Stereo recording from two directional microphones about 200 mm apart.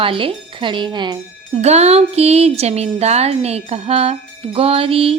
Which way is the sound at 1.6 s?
35° right (ahead or behind).